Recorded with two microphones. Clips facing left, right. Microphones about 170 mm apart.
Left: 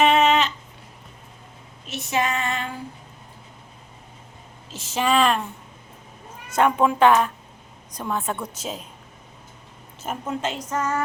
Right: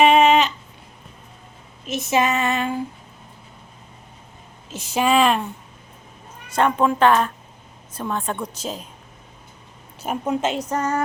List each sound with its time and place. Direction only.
0.0 s a sound: 15° right (ahead or behind)
1.9 s female singing: 20° right (ahead or behind)
4.7 s a woman's voice: 15° right (ahead or behind)
6.6 s a woman's voice: 10° left (ahead or behind)
10.0 s a woman's voice: 15° right (ahead or behind)
10.7 s a sound: 35° right (ahead or behind)